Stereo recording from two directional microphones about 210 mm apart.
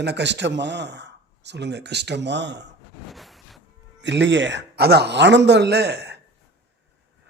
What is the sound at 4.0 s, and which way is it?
Speech, 55° right (ahead or behind).